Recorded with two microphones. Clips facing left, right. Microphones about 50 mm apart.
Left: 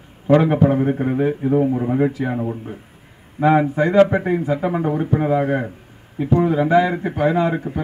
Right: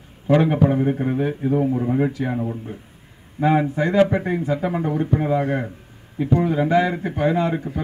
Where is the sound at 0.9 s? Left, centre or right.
Centre.